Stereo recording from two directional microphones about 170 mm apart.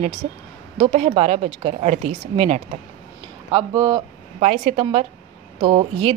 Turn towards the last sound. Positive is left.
turn(degrees=-35)  # may be behind; listen again after turning